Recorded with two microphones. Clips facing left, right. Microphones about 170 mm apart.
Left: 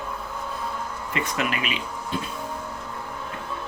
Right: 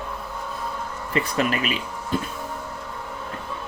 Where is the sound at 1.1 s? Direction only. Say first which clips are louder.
Right 4 dB; 35° right (ahead or behind).